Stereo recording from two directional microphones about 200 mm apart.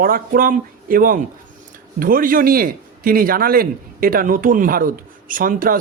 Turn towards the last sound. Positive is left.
turn(degrees=-45)  # may be behind; listen again after turning